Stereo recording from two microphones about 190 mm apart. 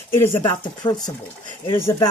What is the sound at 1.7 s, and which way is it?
Speech, 15° left (ahead or behind).